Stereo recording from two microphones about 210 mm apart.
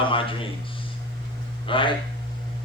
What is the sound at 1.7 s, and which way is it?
Speech, 25° left (ahead or behind).